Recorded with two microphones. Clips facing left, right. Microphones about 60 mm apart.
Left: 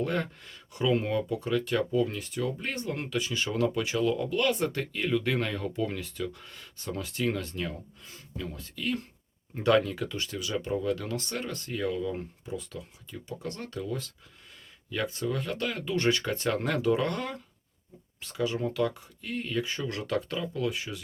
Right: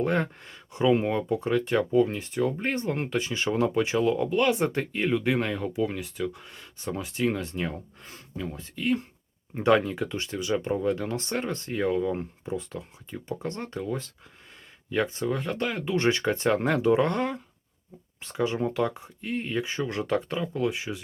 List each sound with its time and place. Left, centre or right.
0.0 s speech: right